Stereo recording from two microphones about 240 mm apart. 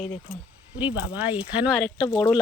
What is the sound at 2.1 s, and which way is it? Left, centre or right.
Speech, centre.